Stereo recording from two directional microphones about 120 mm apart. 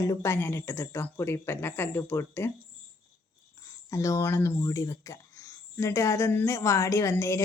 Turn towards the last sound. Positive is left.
turn(degrees=25)  # may be behind; listen again after turning